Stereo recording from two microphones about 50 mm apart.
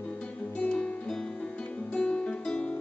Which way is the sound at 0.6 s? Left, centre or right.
Left.